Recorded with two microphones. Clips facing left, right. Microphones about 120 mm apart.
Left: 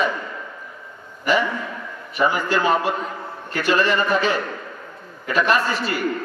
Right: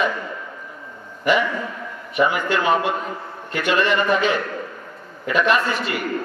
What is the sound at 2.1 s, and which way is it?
A man's voice, 35° left (ahead or behind).